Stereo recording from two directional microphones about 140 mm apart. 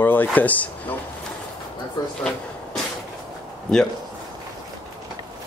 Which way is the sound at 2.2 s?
5° left (ahead or behind).